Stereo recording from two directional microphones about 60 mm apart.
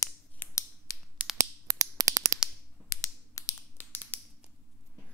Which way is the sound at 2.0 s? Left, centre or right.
Right.